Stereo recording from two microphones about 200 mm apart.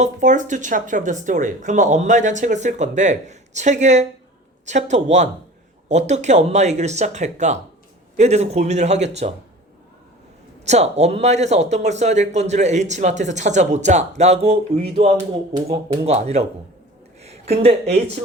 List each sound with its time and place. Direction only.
0.0 s speech: 40° right (ahead or behind)
10.7 s speech: 35° right (ahead or behind)